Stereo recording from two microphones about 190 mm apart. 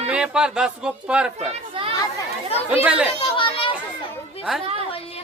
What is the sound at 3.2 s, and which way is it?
Children playing, 25° left (ahead or behind).